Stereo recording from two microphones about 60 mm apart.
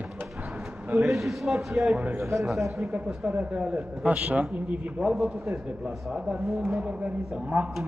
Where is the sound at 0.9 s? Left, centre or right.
Centre.